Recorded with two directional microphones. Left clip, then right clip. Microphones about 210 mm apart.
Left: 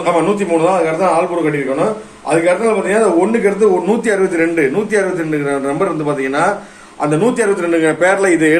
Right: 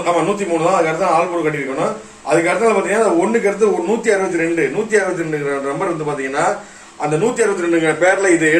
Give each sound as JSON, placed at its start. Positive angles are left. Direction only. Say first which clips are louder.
{"t": 3.0, "sound": "speech", "louder": "left 2 dB", "side_deg": 20}
{"t": 4.0, "sound": "a man's voice", "louder": "left 2 dB", "side_deg": 45}
{"t": 7.3, "sound": "a man's voice", "louder": "left 2 dB", "side_deg": 55}